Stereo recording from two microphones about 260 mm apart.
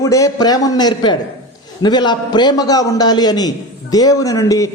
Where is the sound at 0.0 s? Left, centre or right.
Centre.